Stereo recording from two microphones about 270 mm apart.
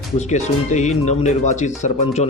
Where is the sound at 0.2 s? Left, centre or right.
Left.